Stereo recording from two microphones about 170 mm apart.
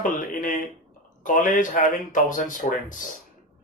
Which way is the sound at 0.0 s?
55° left (ahead or behind).